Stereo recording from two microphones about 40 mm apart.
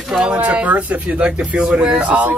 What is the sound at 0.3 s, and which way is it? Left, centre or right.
Speech, right.